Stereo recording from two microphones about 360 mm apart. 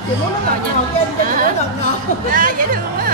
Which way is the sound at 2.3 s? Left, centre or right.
Right.